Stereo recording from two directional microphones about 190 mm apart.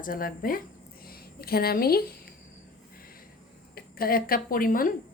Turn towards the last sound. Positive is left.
turn(degrees=45)  # may be behind; listen again after turning